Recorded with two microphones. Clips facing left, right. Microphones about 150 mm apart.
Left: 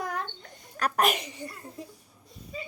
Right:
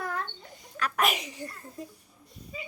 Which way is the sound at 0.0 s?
20° left (ahead or behind).